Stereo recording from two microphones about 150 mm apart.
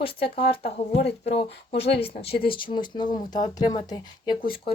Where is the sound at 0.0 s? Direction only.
35° left (ahead or behind).